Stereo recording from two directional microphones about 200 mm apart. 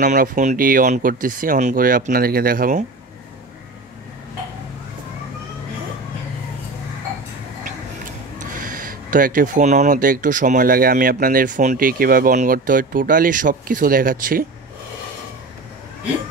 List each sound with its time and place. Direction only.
0.0 s speech: 40° right (ahead or behind)
7.6 s speech: 40° right (ahead or behind)